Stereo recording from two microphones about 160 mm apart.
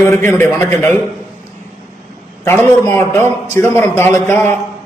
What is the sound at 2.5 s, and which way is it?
A man's voice, 15° left (ahead or behind).